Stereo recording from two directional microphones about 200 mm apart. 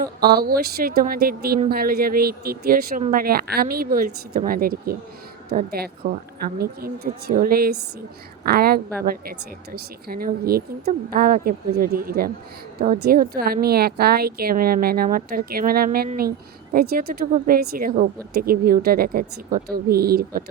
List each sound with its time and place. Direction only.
0.0 s a woman's voice: 50° right (ahead or behind)